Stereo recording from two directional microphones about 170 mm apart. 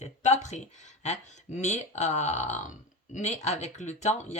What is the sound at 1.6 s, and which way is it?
Speech, 45° left (ahead or behind).